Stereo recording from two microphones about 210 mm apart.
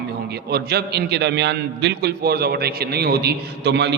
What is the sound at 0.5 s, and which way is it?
A man's voice, 50° right (ahead or behind).